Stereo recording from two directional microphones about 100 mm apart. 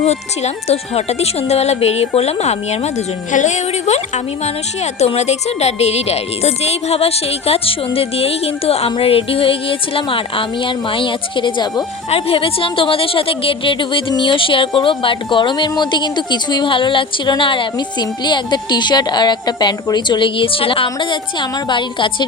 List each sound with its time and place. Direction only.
0.0 s speech: 90° left
4.9 s a woman's voice: 90° left; by 11.9 s 50° left (ahead or behind)
12.1 s a woman's voice: 70° left (ahead or behind); by 22.3 s 55° left (ahead or behind)